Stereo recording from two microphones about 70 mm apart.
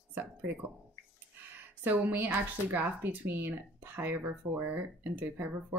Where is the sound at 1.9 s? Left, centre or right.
Right.